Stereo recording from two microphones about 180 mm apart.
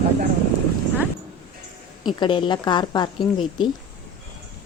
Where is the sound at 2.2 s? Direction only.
25° left (ahead or behind).